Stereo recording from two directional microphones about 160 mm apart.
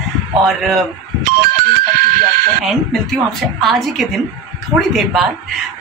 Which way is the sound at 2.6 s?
Centre (ahead or behind).